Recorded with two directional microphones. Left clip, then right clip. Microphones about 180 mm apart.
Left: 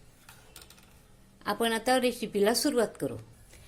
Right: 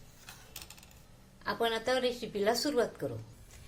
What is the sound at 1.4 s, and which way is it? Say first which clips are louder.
A woman's voice: left 3 dB; 45° left (ahead or behind).